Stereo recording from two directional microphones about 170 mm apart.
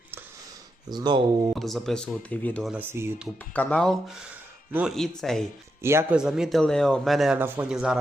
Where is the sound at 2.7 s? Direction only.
10° right (ahead or behind).